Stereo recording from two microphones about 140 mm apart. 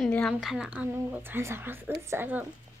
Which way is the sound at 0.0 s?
5° left (ahead or behind).